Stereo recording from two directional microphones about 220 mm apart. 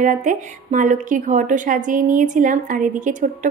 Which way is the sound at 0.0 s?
35° right (ahead or behind).